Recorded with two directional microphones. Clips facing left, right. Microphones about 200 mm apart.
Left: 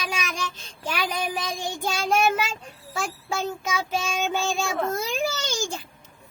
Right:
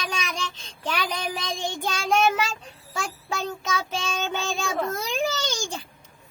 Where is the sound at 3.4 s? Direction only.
10° left (ahead or behind).